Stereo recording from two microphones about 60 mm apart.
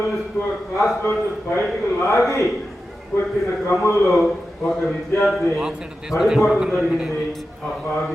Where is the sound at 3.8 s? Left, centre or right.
Left.